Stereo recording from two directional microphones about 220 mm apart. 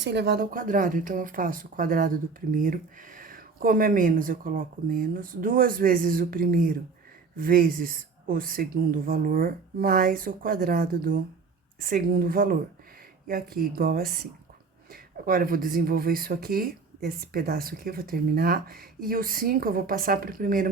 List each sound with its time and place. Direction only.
0.0 s speech: 50° right (ahead or behind)